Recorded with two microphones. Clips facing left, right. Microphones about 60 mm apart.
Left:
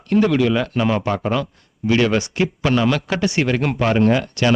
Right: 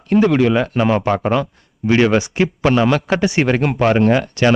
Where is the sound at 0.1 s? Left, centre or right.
Centre.